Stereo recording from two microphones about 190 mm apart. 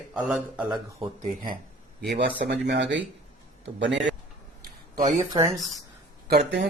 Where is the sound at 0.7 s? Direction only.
30° right (ahead or behind).